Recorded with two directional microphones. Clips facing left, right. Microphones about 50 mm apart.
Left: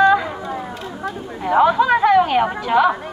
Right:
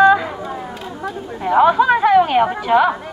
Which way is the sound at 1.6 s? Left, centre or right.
Centre.